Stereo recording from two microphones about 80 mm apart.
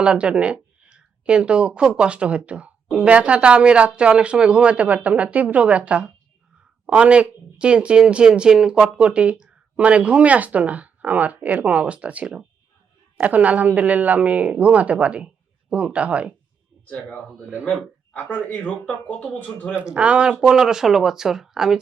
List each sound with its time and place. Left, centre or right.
0.0 s speech: centre
18.1 s speech: left
19.7 s speech: centre